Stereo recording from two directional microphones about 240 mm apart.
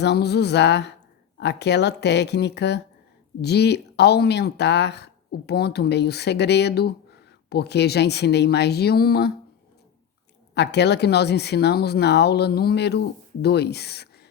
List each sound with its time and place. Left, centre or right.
0.0 s speech: left
10.5 s speech: left